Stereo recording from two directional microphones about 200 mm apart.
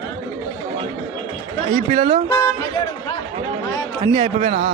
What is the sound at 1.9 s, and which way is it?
Speech, 30° right (ahead or behind).